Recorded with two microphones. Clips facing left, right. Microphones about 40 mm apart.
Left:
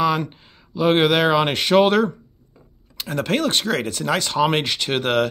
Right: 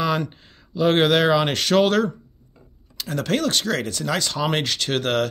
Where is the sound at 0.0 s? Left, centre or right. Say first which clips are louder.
Left 3 dB; centre.